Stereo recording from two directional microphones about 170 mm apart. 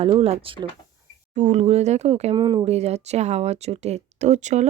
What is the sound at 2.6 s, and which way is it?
Speech, 40° right (ahead or behind).